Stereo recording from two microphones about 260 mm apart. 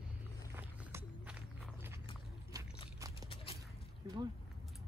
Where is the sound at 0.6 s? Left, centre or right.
Centre.